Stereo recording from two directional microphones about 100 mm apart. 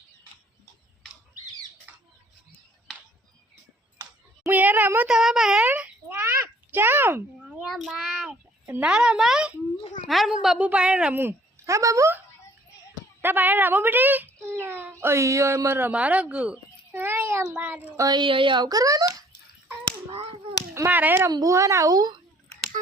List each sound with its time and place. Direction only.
1.9 s bird: 20° right (ahead or behind)
4.0 s a sound: 25° right (ahead or behind)
5.0 s a sound: 5° right (ahead or behind)
5.6 s a sound: 15° right (ahead or behind)
7.6 s child singing: centre (ahead or behind)
8.6 s a woman's voice: 15° right (ahead or behind); by 12.1 s 35° right (ahead or behind)
13.2 s a child's voice: 20° right (ahead or behind)
17.9 s a child's voice: 35° right (ahead or behind)
18.2 s speech: 55° right (ahead or behind); by 19.1 s 35° right (ahead or behind)
20.7 s a woman's voice: 20° right (ahead or behind)
21.2 s a child's voice: 35° right (ahead or behind)